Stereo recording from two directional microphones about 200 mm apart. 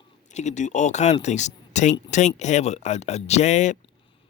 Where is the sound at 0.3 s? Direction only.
35° left (ahead or behind).